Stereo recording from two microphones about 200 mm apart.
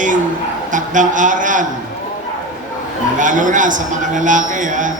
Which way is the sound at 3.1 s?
40° right (ahead or behind).